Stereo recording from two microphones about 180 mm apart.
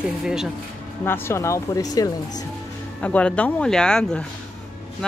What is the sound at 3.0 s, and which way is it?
Speech, 5° left (ahead or behind).